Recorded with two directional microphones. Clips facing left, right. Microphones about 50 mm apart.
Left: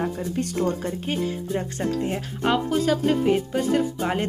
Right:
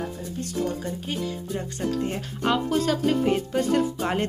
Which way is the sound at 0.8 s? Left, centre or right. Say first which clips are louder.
Left 3 dB; left.